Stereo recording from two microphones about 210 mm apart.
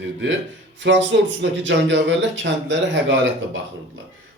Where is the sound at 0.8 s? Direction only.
60° right (ahead or behind).